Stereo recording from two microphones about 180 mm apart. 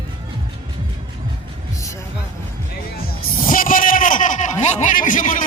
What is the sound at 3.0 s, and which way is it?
Music, 50° left (ahead or behind).